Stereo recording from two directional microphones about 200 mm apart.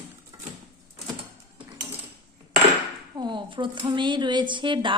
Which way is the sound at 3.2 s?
25° right (ahead or behind).